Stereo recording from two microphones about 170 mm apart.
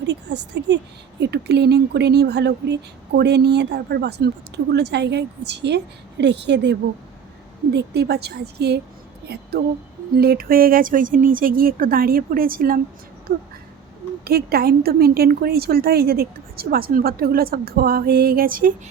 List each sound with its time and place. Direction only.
0.0 s a woman's voice: 90° right
7.7 s a woman's voice: 75° right (ahead or behind); by 12.8 s 60° right (ahead or behind)
14.3 s a woman's voice: 65° right (ahead or behind)